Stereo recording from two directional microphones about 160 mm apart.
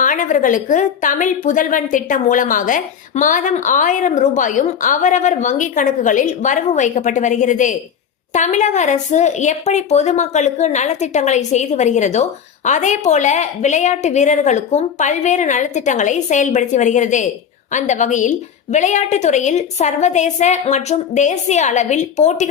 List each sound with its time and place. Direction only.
0.0 s speech: 55° left (ahead or behind)